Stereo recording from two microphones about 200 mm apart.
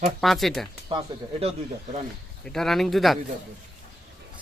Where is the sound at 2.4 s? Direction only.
Centre (ahead or behind).